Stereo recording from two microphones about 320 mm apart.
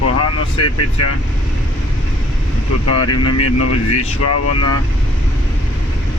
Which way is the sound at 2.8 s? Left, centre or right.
Left.